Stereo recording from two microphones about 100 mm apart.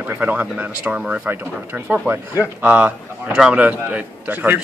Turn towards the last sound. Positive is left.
turn(degrees=-15)  # may be behind; listen again after turning